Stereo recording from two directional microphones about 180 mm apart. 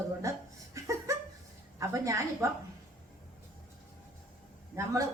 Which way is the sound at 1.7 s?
15° right (ahead or behind).